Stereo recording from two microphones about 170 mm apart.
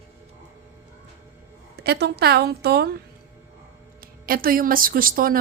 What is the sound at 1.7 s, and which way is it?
A woman's voice, 75° right (ahead or behind).